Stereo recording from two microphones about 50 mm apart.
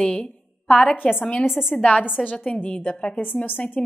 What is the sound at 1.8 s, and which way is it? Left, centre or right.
A woman's voice, left.